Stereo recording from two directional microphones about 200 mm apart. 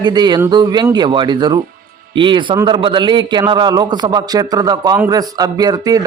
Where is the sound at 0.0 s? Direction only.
20° right (ahead or behind).